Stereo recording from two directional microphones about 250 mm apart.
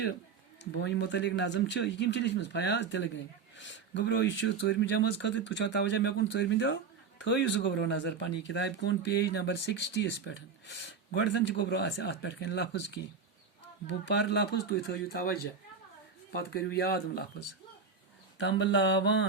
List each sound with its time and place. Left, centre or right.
0.6 s speech: left
18.3 s speech: left